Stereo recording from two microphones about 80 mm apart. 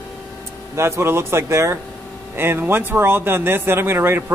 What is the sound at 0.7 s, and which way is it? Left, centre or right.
Speech, right.